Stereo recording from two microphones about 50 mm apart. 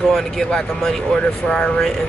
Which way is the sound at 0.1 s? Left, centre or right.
Centre.